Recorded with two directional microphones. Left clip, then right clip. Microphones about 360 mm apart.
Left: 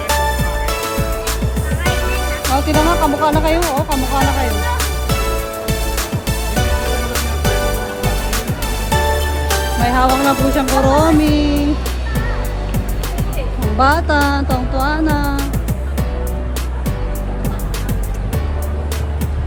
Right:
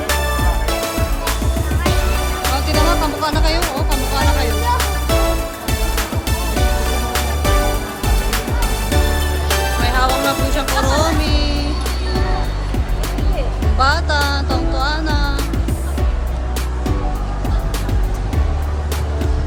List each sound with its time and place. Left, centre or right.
0.2 s music: centre
3.2 s music: centre
3.8 s music: centre
9.8 s music: centre
10.1 s music: centre
10.5 s music: centre
13.7 s music: centre